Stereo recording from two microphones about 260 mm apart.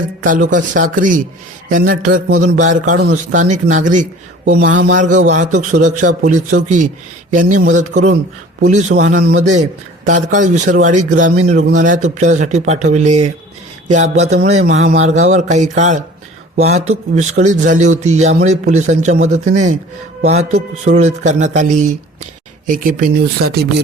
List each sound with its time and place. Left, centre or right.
0.2 s a man's voice: right
16.9 s speech: right
17.4 s a man's voice: right